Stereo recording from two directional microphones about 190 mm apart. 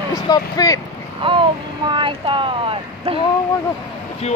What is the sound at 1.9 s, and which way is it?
Speech, 25° right (ahead or behind).